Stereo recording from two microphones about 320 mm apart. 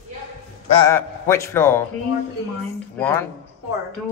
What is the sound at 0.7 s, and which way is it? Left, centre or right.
Speech, centre.